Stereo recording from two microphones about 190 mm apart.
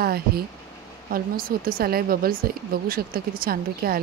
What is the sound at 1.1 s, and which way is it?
Speech, 50° right (ahead or behind).